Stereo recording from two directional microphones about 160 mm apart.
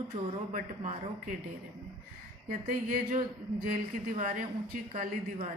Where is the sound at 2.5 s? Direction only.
55° right (ahead or behind).